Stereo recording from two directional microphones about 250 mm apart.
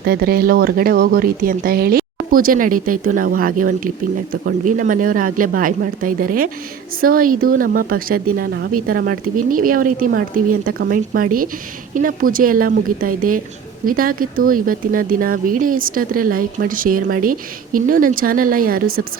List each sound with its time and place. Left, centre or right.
0.0 s speech: right